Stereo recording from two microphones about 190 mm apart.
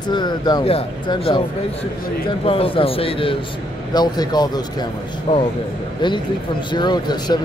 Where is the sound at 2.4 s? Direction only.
30° left (ahead or behind).